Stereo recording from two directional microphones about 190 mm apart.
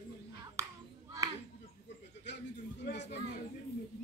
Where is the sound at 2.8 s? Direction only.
65° left (ahead or behind).